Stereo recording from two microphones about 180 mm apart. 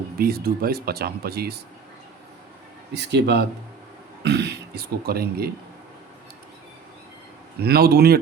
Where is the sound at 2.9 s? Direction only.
70° right (ahead or behind).